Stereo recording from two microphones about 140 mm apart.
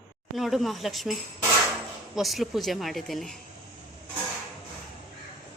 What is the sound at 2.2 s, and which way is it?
Speech, centre (ahead or behind).